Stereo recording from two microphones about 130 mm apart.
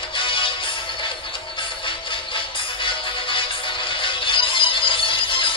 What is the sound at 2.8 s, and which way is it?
Music, 40° left (ahead or behind).